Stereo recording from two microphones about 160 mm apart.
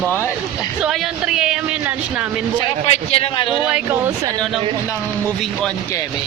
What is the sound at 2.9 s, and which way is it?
Speech, 40° left (ahead or behind).